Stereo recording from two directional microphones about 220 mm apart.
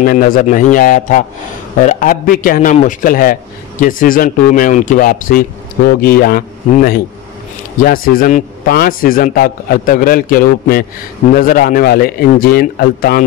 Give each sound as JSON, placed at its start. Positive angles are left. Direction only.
{"t": 0.0, "sound": "a man's voice", "side_deg": 40}